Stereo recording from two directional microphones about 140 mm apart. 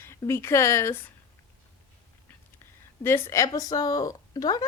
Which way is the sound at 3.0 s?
15° left (ahead or behind).